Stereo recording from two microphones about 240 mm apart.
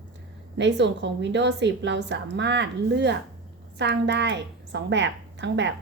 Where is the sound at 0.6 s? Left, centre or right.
Right.